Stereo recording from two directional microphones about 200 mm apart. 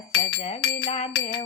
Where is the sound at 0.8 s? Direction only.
30° left (ahead or behind).